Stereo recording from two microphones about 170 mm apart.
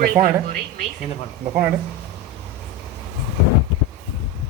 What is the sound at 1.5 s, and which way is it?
Speech, 10° right (ahead or behind).